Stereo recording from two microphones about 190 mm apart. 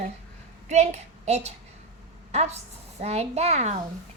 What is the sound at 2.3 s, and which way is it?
Child singing, 35° right (ahead or behind).